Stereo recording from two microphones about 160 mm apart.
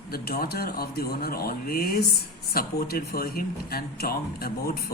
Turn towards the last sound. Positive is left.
turn(degrees=70)  # may be behind; listen again after turning